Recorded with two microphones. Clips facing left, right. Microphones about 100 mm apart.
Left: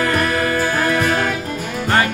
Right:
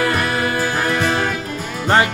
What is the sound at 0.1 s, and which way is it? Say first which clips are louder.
Music: left 1 dB; 30° right (ahead or behind).